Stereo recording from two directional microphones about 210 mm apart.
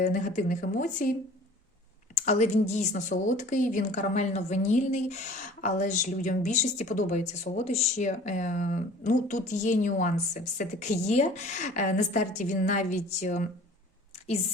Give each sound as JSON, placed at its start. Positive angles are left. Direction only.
{"t": 0.0, "sound": "a woman's voice", "side_deg": 35}
{"t": 2.1, "sound": "a woman's voice", "side_deg": 35}